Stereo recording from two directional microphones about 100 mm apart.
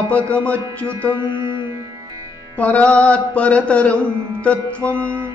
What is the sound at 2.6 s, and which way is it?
Music, 15° left (ahead or behind).